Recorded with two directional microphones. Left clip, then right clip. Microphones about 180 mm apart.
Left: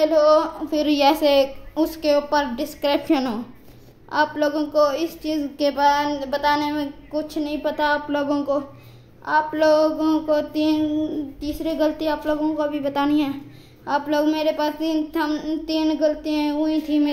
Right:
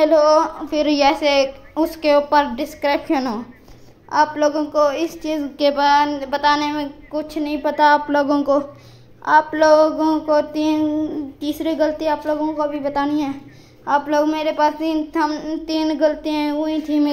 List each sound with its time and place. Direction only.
0.0 s a woman's voice: 15° right (ahead or behind); by 1.0 s centre (ahead or behind)
1.0 s a woman's voice: 15° left (ahead or behind)
1.4 s a woman's voice: 10° right (ahead or behind)
2.9 s a woman's voice: 10° left (ahead or behind)
4.1 s a woman's voice: 5° right (ahead or behind)
5.2 s child singing: 20° right (ahead or behind)
5.6 s a woman's voice: 10° right (ahead or behind); by 13.3 s 5° left (ahead or behind)
13.8 s a woman's voice: 5° right (ahead or behind)
15.6 s child singing: 15° right (ahead or behind)